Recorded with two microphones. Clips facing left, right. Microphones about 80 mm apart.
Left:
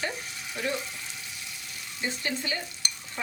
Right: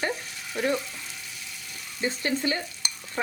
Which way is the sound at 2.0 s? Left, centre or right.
Right.